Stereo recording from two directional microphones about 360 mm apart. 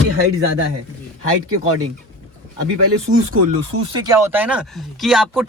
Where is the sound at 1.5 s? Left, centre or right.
Right.